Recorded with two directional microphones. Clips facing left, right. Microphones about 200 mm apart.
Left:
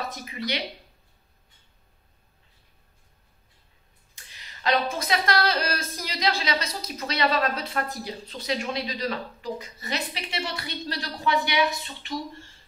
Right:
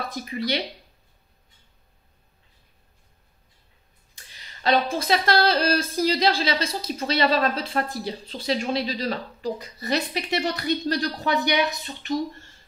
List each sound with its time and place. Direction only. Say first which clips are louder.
0.1 s a woman's voice: right 5 dB; 35° right (ahead or behind)
4.6 s a woman's voice: right 3 dB; 30° right (ahead or behind)